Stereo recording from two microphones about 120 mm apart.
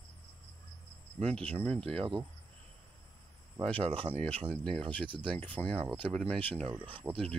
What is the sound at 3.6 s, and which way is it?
Speech, 10° left (ahead or behind).